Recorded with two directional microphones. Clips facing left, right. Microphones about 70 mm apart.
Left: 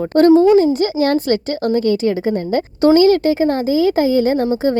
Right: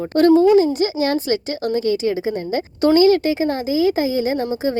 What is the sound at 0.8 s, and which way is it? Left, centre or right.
Speech, left.